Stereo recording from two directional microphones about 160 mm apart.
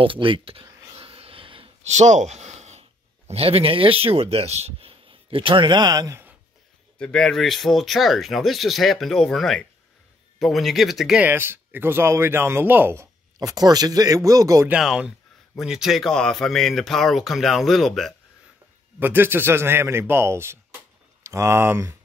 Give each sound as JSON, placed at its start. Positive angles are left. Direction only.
{"t": 0.0, "sound": "speech", "side_deg": -35}
{"t": 0.7, "sound": "a sound", "side_deg": -20}
{"t": 0.9, "sound": "a sound", "side_deg": -35}
{"t": 3.3, "sound": "speech", "side_deg": -40}
{"t": 7.0, "sound": "speech", "side_deg": 5}
{"t": 14.7, "sound": "speech", "side_deg": -5}
{"t": 18.9, "sound": "speech", "side_deg": -10}